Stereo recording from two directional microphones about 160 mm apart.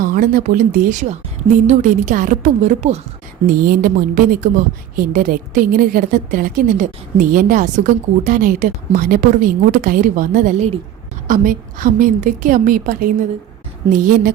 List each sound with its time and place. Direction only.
0.0 s a woman's voice: 60° right (ahead or behind)
3.4 s a woman's voice: 60° right (ahead or behind)